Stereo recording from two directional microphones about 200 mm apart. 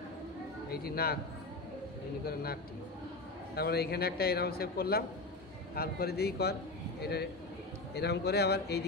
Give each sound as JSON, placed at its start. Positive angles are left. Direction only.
{"t": 0.7, "sound": "a man's voice", "side_deg": 50}
{"t": 2.2, "sound": "a man's voice", "side_deg": 50}